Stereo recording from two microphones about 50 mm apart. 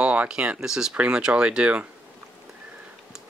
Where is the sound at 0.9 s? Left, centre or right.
Right.